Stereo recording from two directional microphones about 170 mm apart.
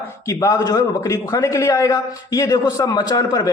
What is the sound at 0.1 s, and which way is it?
A man's voice, 20° left (ahead or behind).